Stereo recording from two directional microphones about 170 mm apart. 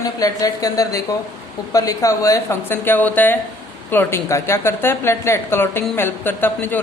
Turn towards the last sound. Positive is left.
turn(degrees=10)  # may be behind; listen again after turning